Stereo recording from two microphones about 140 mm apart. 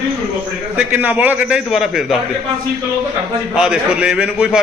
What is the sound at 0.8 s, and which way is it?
A man's voice, 10° right (ahead or behind).